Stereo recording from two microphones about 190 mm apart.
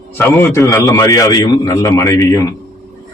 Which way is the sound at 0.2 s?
15° left (ahead or behind).